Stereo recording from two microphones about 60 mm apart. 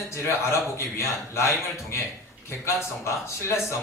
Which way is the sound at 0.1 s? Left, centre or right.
Left.